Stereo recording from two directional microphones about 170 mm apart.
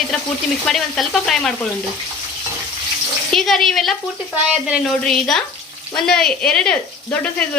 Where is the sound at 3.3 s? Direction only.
Centre (ahead or behind).